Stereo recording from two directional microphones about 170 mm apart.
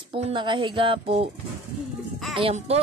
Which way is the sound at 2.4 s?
35° right (ahead or behind).